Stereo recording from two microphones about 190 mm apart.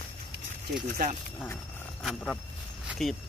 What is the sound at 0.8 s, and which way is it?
Speech, 45° right (ahead or behind).